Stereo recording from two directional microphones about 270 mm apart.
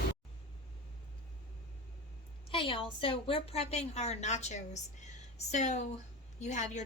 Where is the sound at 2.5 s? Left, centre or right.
Centre.